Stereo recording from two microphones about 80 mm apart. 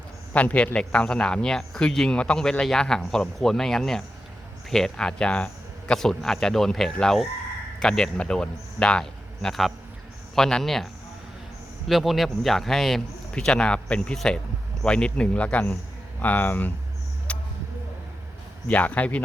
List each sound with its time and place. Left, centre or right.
0.3 s speech: centre
11.9 s speech: centre; by 16.7 s left
17.3 s basketball bounce: centre
18.7 s speech: centre